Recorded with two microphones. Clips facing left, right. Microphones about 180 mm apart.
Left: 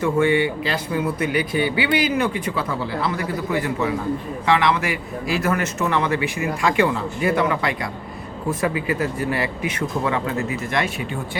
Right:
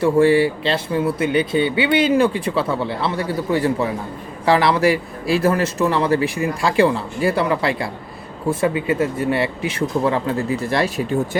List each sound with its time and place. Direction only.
0.0 s a man's voice: 35° right (ahead or behind)